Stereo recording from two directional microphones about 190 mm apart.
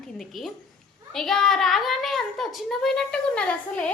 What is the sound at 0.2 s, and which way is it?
A woman's voice, centre (ahead or behind).